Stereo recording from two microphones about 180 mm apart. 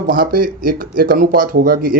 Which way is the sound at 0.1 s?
55° right (ahead or behind).